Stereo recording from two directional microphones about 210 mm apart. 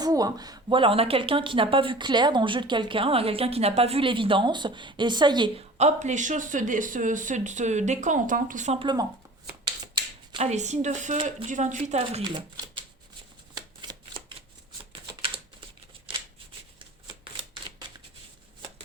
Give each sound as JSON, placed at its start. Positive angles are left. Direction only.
{"t": 0.0, "sound": "a woman's voice", "side_deg": -15}
{"t": 10.3, "sound": "speech", "side_deg": -35}
{"t": 13.5, "sound": "shuffling cards", "side_deg": -20}